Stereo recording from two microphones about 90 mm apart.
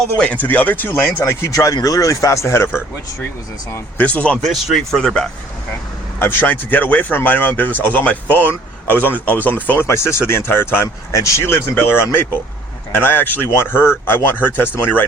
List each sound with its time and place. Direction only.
0.2 s speech: 15° left (ahead or behind)
1.2 s speech: 35° left (ahead or behind); by 4.4 s 15° left (ahead or behind)
4.4 s speech: centre (ahead or behind)
6.1 s speech: 25° left (ahead or behind)
9.8 s speech: 30° left (ahead or behind)